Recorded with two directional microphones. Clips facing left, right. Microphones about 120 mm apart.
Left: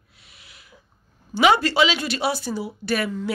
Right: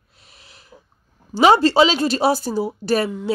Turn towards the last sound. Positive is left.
turn(degrees=-40)  # may be behind; listen again after turning